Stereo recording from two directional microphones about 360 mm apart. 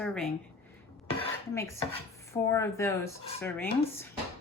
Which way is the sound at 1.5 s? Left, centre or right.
Centre.